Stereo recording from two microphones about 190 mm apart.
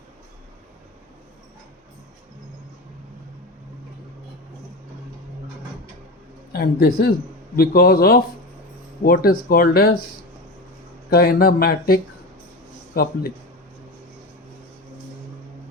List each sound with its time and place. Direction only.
6.5 s speech: 55° left (ahead or behind)
11.1 s speech: 55° left (ahead or behind)